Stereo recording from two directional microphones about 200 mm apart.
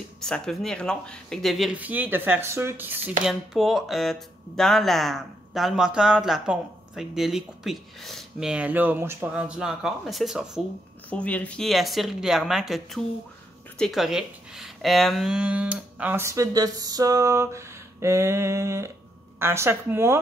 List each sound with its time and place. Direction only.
0.2 s speech: centre (ahead or behind)